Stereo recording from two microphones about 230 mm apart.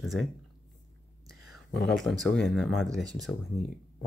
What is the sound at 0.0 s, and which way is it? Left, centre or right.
Speech, centre.